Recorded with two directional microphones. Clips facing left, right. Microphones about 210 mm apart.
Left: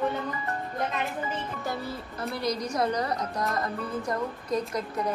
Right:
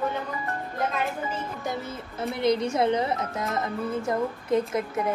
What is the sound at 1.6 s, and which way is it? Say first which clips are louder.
Speech: right 1 dB; 20° right (ahead or behind).